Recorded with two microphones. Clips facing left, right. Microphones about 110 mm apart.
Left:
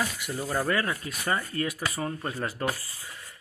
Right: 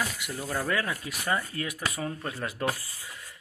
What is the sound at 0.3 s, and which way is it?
Speech, 5° left (ahead or behind).